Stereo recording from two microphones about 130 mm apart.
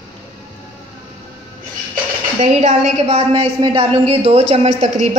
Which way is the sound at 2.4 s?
60° right (ahead or behind).